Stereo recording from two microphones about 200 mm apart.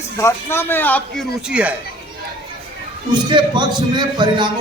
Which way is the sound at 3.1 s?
25° right (ahead or behind).